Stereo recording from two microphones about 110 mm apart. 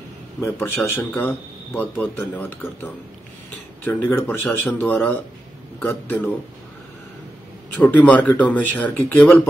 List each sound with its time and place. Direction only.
0.4 s speech: 25° left (ahead or behind)
7.7 s speech: 15° left (ahead or behind)